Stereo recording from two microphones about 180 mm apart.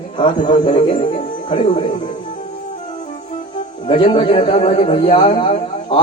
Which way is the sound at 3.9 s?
30° left (ahead or behind).